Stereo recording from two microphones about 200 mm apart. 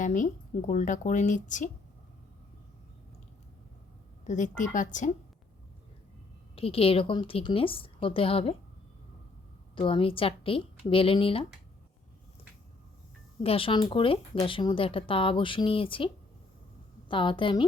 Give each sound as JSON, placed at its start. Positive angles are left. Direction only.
{"t": 0.0, "sound": "speech", "side_deg": 40}
{"t": 4.2, "sound": "speech", "side_deg": 40}
{"t": 6.6, "sound": "speech", "side_deg": 30}
{"t": 9.7, "sound": "speech", "side_deg": 25}
{"t": 13.4, "sound": "speech", "side_deg": 30}
{"t": 17.1, "sound": "speech", "side_deg": 25}